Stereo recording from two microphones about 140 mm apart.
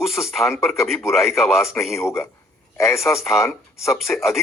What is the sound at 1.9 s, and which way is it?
Speech, 20° left (ahead or behind).